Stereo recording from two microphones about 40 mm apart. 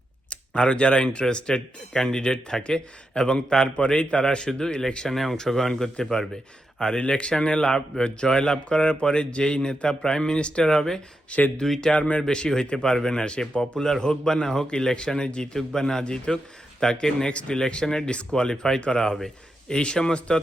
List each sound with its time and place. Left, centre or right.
0.3 s a man's voice: left
5.0 s a man's voice: centre
11.9 s speech: left
12.3 s speech: left
13.6 s a man's voice: centre
18.1 s speech: left